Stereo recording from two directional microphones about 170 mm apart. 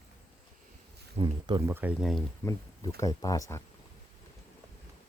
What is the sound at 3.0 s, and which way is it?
Speech, 20° left (ahead or behind).